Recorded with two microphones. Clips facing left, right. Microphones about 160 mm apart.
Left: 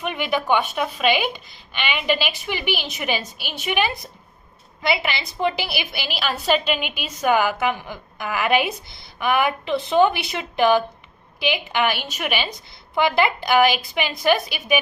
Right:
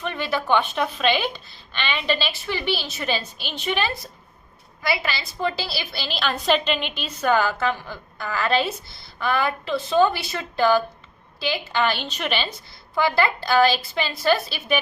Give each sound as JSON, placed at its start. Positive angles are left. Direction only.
{"t": 0.0, "sound": "a woman's voice", "side_deg": 15}